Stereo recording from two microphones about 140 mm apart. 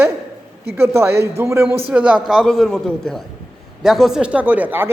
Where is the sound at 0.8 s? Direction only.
15° right (ahead or behind).